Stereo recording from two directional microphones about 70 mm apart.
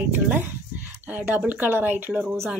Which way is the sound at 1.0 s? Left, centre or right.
Right.